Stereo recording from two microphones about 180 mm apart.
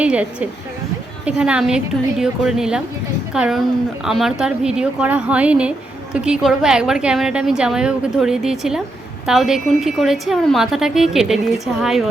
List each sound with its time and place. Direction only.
0.0 s a woman's voice: 5° right (ahead or behind)